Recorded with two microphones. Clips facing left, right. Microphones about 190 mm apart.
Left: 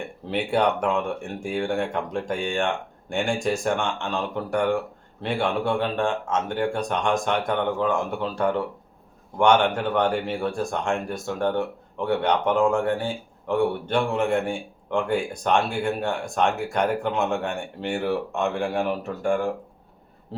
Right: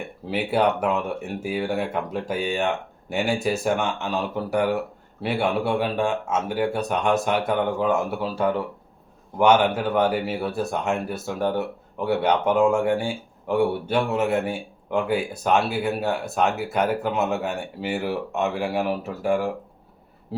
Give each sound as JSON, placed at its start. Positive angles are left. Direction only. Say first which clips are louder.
{"t": 0.3, "sound": "speech", "louder": "right 1 dB", "side_deg": -5}